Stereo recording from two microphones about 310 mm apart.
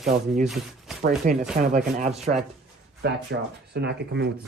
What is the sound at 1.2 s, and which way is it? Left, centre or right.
Speech, right.